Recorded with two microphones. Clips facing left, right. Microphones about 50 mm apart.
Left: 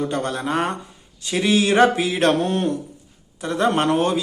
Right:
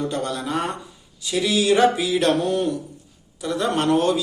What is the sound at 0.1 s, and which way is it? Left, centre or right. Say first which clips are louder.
A man's voice: left 2 dB; left.